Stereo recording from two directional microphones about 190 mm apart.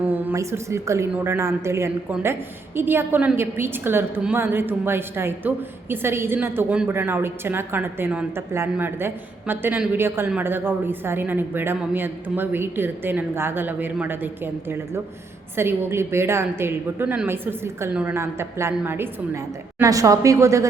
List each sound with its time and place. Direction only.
0.0 s a woman's voice: 10° right (ahead or behind)